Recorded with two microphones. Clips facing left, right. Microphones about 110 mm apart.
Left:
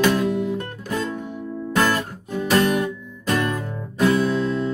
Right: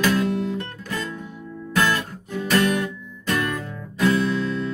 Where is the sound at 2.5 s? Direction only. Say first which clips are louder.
Left 2 dB; 25° left (ahead or behind).